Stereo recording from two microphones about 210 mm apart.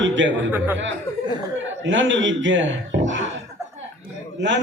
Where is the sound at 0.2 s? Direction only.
60° right (ahead or behind).